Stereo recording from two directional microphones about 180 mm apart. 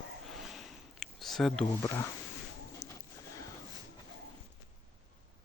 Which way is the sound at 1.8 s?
15° left (ahead or behind).